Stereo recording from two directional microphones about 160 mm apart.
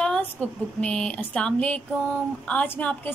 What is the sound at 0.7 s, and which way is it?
A woman's voice, 5° left (ahead or behind).